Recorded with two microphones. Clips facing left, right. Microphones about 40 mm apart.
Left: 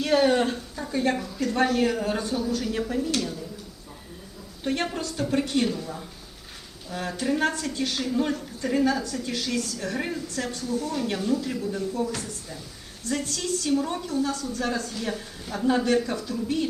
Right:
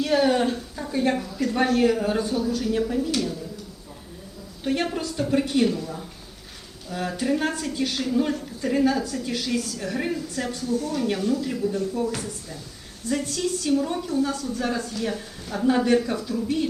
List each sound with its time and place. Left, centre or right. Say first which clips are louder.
0.0 s speech: even; centre
1.1 s speech: right 2 dB; centre
4.6 s a woman's voice: right 2 dB; centre
13.1 s a woman's voice: right 3 dB; centre
13.7 s speech: right 1 dB; centre
14.1 s a woman's voice: right 3 dB; centre
14.9 s speech: right 3 dB; centre
15.6 s a woman's voice: right 2 dB; centre